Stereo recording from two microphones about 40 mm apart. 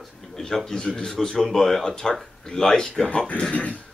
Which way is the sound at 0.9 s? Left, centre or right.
Centre.